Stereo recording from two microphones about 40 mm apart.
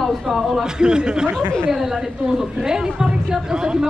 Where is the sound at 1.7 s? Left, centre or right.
Centre.